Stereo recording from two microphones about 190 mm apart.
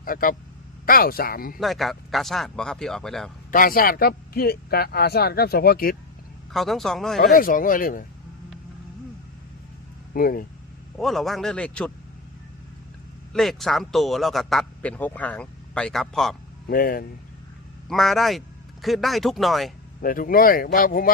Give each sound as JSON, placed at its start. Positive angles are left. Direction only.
{"t": 0.0, "sound": "speech", "side_deg": 50}
{"t": 1.5, "sound": "speech", "side_deg": 0}
{"t": 3.5, "sound": "speech", "side_deg": 50}
{"t": 6.5, "sound": "speech", "side_deg": 0}
{"t": 7.2, "sound": "speech", "side_deg": 45}
{"t": 10.2, "sound": "speech", "side_deg": 50}
{"t": 10.9, "sound": "speech", "side_deg": 0}
{"t": 13.3, "sound": "speech", "side_deg": 0}
{"t": 16.6, "sound": "speech", "side_deg": 50}
{"t": 17.8, "sound": "speech", "side_deg": 0}
{"t": 20.0, "sound": "speech", "side_deg": 45}